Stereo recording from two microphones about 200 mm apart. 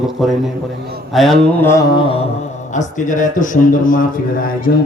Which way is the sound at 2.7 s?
40° left (ahead or behind).